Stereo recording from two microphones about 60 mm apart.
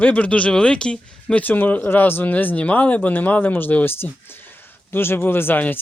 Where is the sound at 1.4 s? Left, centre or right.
Left.